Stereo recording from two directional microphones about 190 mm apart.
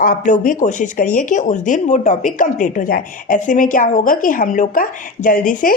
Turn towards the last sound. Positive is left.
turn(degrees=45)  # may be behind; listen again after turning